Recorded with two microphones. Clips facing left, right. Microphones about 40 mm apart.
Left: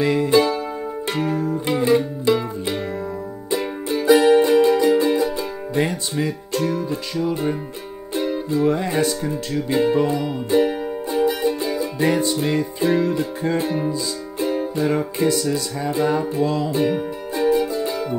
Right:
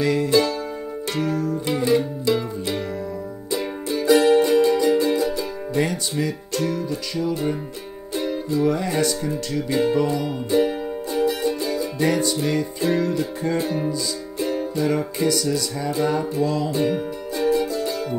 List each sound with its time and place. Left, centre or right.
0.0 s music: centre
4.1 s music: centre
5.8 s speech: centre
8.1 s speech: centre
9.8 s music: centre
16.0 s music: centre